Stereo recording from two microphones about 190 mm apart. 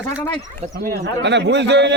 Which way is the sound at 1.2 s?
65° right (ahead or behind).